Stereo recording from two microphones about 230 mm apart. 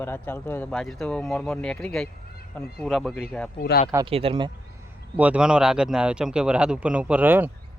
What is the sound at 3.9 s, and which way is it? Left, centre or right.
Speech, centre.